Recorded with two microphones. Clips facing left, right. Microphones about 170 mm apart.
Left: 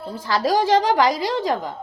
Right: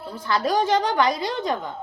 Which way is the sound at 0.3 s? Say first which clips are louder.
Left 3 dB; 90° left.